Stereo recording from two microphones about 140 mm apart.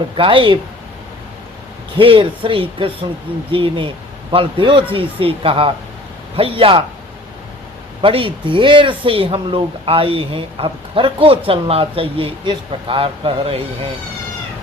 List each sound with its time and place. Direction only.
0.2 s speech: 40° right (ahead or behind)
2.0 s speech: 40° right (ahead or behind)
8.0 s speech: 40° right (ahead or behind)